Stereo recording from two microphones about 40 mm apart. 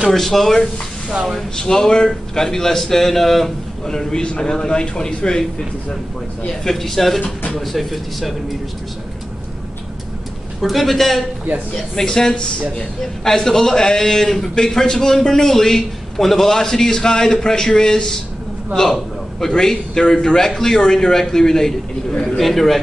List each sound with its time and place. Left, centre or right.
0.1 s speech: centre
1.6 s a man's voice: centre
3.9 s a man's voice: centre
6.6 s speech: centre
10.6 s speech: centre
11.9 s a man's voice: centre
19.4 s a man's voice: centre